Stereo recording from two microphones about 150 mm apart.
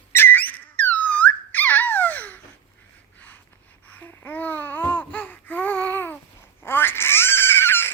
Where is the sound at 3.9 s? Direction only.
10° left (ahead or behind).